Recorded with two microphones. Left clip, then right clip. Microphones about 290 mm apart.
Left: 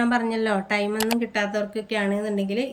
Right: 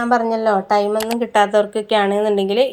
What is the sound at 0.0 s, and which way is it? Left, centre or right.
A woman's voice, centre.